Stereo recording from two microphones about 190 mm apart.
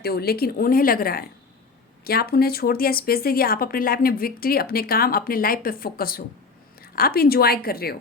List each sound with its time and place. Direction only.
0.0 s speech: 55° left (ahead or behind)